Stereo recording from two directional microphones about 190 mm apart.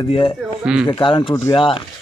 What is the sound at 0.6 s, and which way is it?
Speech, 5° right (ahead or behind).